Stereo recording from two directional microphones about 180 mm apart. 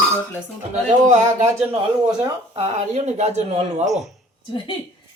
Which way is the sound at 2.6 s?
35° right (ahead or behind).